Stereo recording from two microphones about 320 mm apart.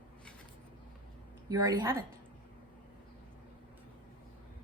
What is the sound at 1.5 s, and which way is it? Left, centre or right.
Speech, centre.